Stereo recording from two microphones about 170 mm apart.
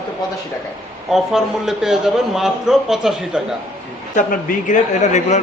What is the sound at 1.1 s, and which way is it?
A man's voice, centre (ahead or behind).